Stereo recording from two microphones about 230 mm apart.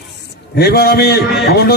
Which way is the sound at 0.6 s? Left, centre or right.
Left.